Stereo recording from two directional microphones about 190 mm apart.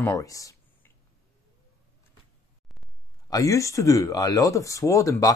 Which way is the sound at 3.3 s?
15° left (ahead or behind).